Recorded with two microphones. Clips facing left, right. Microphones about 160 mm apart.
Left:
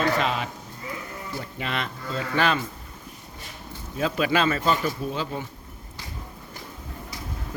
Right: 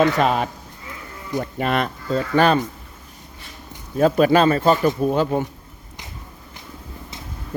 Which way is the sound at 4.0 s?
45° right (ahead or behind).